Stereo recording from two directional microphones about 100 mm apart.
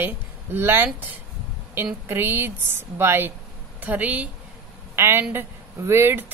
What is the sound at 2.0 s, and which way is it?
A woman's voice, 20° right (ahead or behind).